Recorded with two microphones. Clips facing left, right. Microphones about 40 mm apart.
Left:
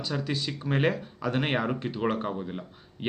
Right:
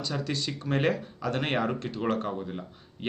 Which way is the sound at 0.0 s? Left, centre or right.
Centre.